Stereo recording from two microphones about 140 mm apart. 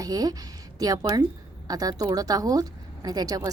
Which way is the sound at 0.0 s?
25° right (ahead or behind).